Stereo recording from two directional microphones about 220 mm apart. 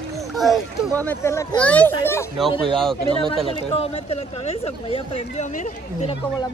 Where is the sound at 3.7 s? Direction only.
25° left (ahead or behind).